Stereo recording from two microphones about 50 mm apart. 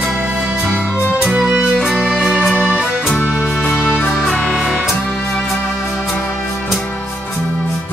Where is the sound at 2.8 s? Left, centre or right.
Centre.